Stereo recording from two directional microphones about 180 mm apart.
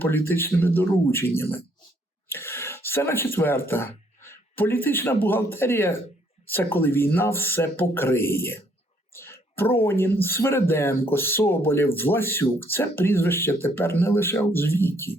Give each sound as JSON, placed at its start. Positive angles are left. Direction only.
{"t": 0.3, "sound": "speech", "side_deg": 10}
{"t": 2.3, "sound": "a sound", "side_deg": 15}
{"t": 3.3, "sound": "speech", "side_deg": 15}